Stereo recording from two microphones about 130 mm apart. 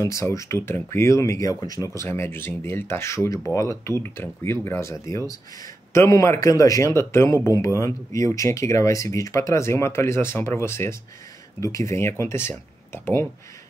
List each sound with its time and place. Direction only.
0.0 s speech: 25° left (ahead or behind)